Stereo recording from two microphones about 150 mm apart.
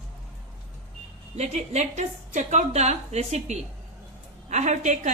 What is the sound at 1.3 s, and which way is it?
A woman's voice, 45° right (ahead or behind).